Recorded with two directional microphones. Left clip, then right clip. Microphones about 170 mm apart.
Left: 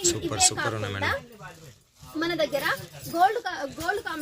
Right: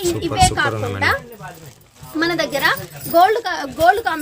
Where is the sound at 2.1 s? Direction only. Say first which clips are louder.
Right 7 dB; 15° right (ahead or behind).